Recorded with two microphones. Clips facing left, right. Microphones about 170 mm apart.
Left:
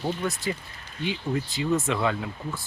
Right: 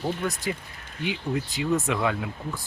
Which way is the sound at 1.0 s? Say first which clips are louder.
Even; 15° right (ahead or behind).